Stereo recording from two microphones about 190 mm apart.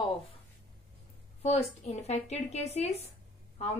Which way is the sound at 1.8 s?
35° left (ahead or behind).